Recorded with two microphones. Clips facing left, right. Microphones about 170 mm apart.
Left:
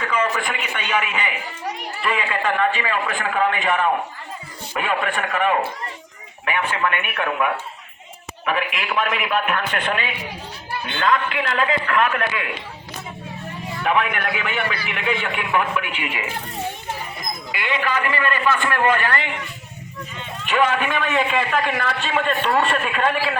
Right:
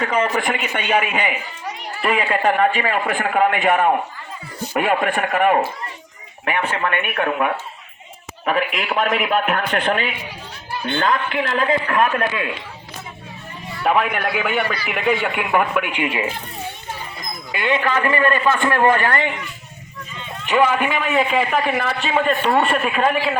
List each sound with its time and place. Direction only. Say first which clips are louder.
0.2 s a man's voice: right 3 dB; 50° right (ahead or behind); by 12.5 s 30° right (ahead or behind)
13.8 s a man's voice: right 3 dB; 40° right (ahead or behind)
17.6 s a man's voice: right 4 dB; 25° right (ahead or behind)
20.5 s a man's voice: right 3 dB; 10° right (ahead or behind)